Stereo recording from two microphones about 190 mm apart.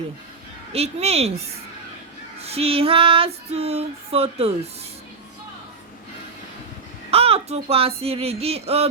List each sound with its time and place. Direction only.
0.7 s female singing: 35° right (ahead or behind)
2.4 s female singing: 30° right (ahead or behind)
7.1 s speech: 30° right (ahead or behind)